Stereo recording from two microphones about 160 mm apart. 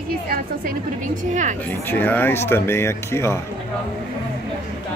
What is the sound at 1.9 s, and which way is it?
Speech, 10° left (ahead or behind).